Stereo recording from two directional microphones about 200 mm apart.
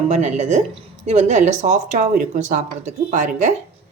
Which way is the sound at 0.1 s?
35° right (ahead or behind).